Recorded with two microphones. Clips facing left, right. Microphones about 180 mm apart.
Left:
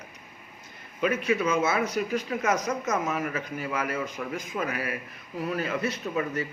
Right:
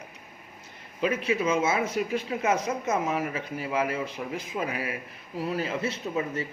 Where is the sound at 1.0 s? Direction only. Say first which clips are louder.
Left 1 dB; 30° right (ahead or behind).